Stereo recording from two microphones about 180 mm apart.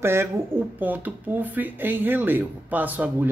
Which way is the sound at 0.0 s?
15° right (ahead or behind).